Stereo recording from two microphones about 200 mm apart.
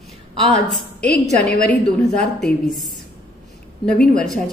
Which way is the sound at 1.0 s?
5° left (ahead or behind).